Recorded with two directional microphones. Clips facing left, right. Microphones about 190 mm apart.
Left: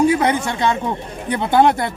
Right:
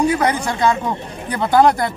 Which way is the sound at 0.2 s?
25° left (ahead or behind).